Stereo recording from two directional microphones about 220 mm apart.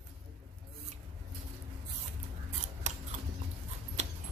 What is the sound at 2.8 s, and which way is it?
Scissors, 30° right (ahead or behind).